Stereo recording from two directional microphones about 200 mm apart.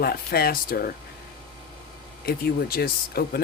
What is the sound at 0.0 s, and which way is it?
Speech, 50° left (ahead or behind).